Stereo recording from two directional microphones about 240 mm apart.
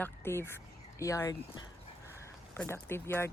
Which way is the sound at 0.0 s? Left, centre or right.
Centre.